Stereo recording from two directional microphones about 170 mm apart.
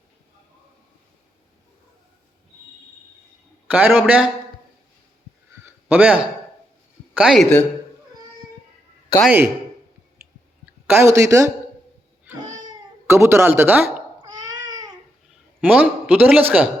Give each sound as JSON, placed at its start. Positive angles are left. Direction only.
{"t": 3.7, "sound": "a man's voice", "side_deg": -10}
{"t": 5.6, "sound": "a sound", "side_deg": -10}
{"t": 7.1, "sound": "speech", "side_deg": -5}
{"t": 10.8, "sound": "a man's voice", "side_deg": -15}
{"t": 13.1, "sound": "a man's voice", "side_deg": -15}
{"t": 14.3, "sound": "babbling", "side_deg": -25}
{"t": 15.6, "sound": "a man's voice", "side_deg": -10}